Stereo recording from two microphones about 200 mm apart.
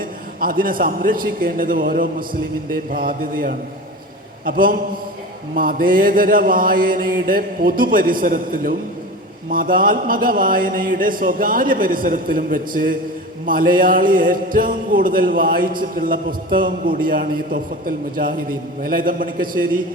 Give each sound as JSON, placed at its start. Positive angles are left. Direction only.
{"t": 0.3, "sound": "mantra", "side_deg": -45}